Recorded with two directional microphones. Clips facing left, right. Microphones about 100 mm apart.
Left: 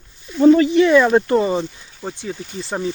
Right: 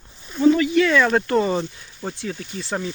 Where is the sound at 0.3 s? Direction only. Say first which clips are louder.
Left 5 dB; 35° left (ahead or behind).